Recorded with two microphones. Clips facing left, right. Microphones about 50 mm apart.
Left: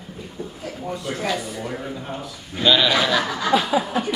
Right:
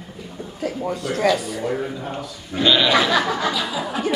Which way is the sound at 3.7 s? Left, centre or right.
Left.